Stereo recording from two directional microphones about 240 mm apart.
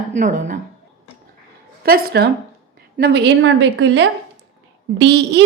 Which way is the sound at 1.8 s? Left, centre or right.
Right.